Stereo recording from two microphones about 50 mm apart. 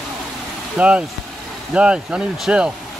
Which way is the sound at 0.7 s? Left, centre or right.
Right.